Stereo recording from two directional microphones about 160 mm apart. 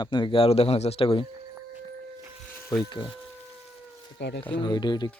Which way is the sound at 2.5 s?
15° left (ahead or behind).